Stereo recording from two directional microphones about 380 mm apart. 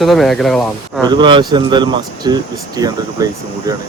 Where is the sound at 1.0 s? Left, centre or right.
Centre.